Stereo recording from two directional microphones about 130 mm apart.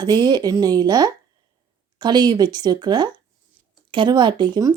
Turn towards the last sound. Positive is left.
turn(degrees=-30)  # may be behind; listen again after turning